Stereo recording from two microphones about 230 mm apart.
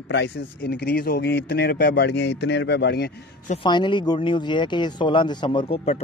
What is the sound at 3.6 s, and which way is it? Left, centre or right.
Speech, left.